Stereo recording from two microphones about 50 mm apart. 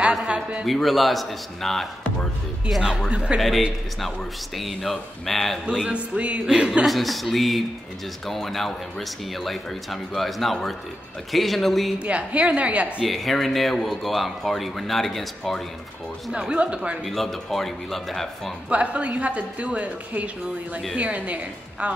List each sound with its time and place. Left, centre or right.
0.3 s a sound: right
0.7 s speech: centre
3.1 s speech: right
3.3 s speech: centre
5.7 s speech: right
6.9 s speech: centre
12.0 s speech: right
13.0 s speech: centre
16.3 s speech: centre
17.0 s speech: centre
18.7 s speech: right